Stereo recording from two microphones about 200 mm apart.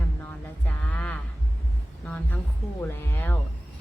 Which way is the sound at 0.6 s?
5° left (ahead or behind).